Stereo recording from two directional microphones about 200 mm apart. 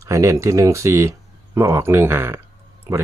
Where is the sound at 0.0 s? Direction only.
15° right (ahead or behind).